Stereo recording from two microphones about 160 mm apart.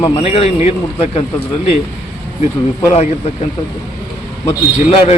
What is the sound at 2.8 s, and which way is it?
Speech, 40° left (ahead or behind).